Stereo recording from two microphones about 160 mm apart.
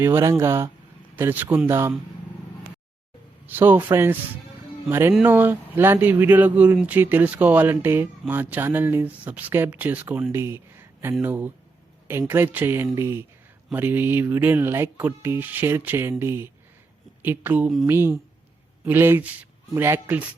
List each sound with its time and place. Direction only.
0.0 s speech: 15° right (ahead or behind)
3.4 s speech: 10° right (ahead or behind)